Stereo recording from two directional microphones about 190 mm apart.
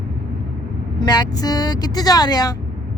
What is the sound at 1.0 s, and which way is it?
Speech, 20° left (ahead or behind).